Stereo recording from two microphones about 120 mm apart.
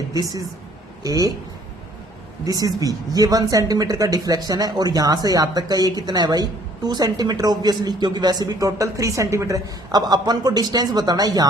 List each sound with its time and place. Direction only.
0.1 s a woman's voice: 30° right (ahead or behind)
2.4 s speech: 30° right (ahead or behind)